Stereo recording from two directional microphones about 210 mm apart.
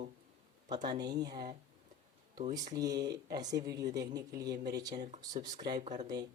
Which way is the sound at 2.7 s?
20° right (ahead or behind).